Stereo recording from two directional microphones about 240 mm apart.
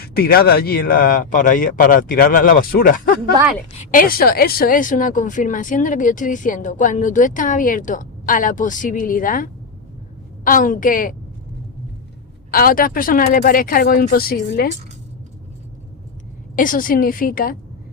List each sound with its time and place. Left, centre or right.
0.0 s a woman's voice: left
12.5 s a woman's voice: left
16.6 s a woman's voice: left